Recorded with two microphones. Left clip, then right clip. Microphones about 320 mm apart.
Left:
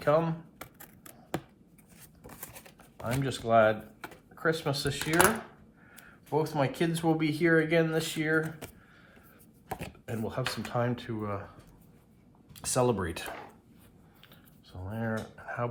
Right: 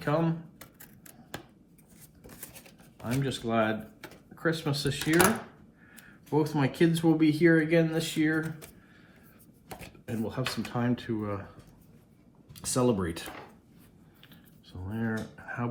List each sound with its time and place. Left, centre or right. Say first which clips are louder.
0.0 s speech: left 3 dB; left
3.0 s speech: even; left
9.8 s speech: right 4 dB; left
12.5 s speech: even; left
14.7 s a sound: even; centre